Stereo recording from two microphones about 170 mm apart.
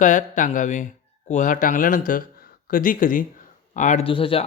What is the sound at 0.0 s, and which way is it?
Speech, 50° left (ahead or behind).